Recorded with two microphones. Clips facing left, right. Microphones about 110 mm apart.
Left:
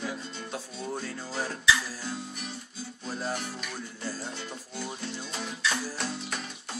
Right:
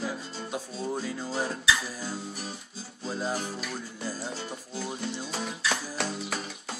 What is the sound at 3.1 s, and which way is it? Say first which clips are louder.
Music: right 3 dB; 5° right (ahead or behind).